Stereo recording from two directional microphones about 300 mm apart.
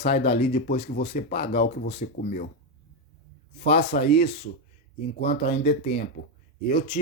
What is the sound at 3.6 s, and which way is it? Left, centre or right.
Speech, left.